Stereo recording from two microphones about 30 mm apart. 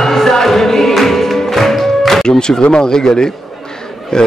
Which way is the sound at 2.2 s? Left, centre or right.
Left.